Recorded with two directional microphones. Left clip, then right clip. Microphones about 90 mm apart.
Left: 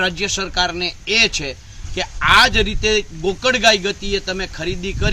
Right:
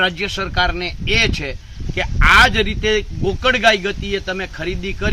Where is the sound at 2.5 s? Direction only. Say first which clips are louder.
Even; 30° right (ahead or behind).